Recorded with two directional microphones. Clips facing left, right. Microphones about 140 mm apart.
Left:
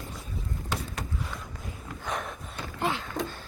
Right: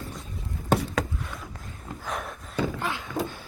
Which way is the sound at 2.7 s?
25° left (ahead or behind).